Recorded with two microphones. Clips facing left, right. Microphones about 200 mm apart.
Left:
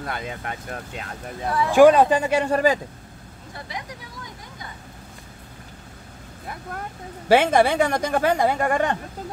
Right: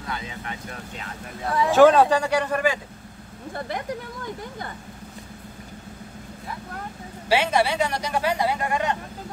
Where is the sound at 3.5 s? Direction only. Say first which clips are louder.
Right 6 dB; 55° right (ahead or behind).